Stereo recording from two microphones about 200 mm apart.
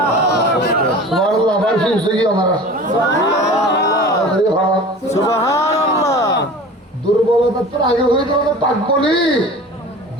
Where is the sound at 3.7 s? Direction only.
60° left (ahead or behind).